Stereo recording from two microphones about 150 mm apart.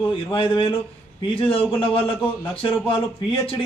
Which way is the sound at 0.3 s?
35° left (ahead or behind).